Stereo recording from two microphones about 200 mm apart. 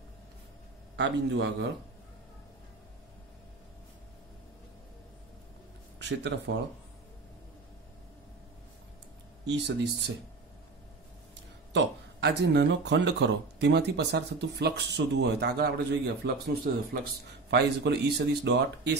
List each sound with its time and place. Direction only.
0.9 s speech: 65° right (ahead or behind)
5.9 s speech: 60° right (ahead or behind)
9.5 s speech: 60° right (ahead or behind)
11.7 s speech: 60° right (ahead or behind)